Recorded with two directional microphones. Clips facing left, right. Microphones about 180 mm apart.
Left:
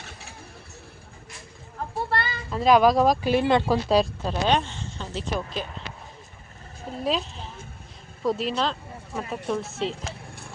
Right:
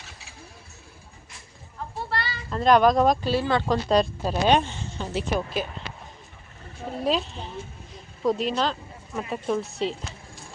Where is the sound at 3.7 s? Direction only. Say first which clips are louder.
Even; 5° left (ahead or behind).